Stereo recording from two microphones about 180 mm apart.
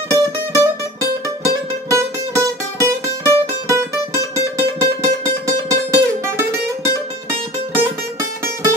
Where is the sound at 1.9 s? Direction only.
15° right (ahead or behind).